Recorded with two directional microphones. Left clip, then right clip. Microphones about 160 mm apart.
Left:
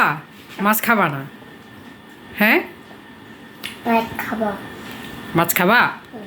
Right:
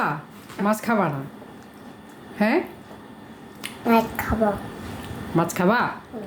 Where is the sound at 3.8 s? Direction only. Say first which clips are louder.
Left 1 dB; 30° right (ahead or behind).